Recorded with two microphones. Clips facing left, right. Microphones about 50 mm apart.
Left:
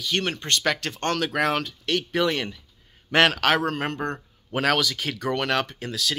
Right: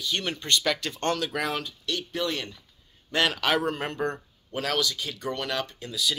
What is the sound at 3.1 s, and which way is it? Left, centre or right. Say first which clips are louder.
Speech: left 6 dB; left.